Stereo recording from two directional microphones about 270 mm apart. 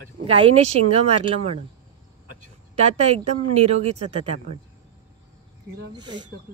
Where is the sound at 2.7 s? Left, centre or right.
Right.